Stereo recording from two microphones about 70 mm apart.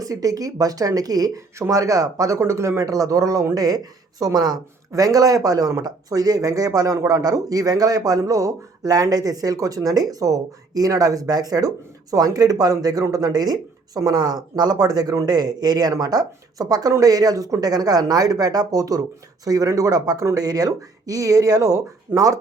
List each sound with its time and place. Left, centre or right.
0.0 s speech: right
1.5 s speech: right
8.2 s speech: right